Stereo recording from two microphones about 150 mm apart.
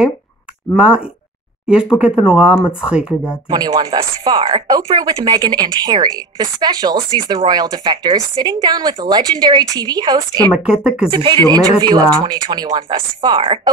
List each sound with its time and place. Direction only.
1.7 s speech: 5° right (ahead or behind)
3.4 s speech: 25° right (ahead or behind)
10.7 s speech: 5° right (ahead or behind)
11.1 s speech: 30° right (ahead or behind)